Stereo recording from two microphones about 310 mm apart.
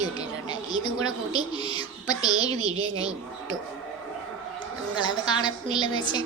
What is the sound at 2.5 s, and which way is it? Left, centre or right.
Speech, right.